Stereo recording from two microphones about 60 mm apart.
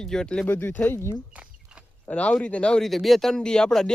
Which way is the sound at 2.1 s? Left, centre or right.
Centre.